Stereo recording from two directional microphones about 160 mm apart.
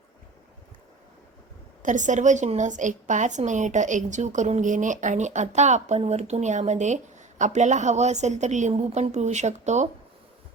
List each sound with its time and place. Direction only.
1.8 s a woman's voice: 50° right (ahead or behind)